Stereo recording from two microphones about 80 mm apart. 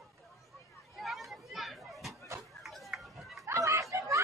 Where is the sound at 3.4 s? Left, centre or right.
Right.